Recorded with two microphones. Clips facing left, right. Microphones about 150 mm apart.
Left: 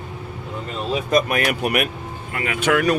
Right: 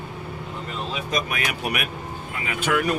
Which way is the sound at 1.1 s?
50° left (ahead or behind).